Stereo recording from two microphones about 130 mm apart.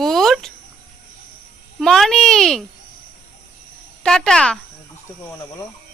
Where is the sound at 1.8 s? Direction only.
Centre (ahead or behind).